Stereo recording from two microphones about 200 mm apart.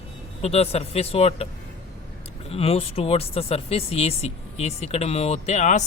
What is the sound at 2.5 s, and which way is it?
Speech, 30° left (ahead or behind).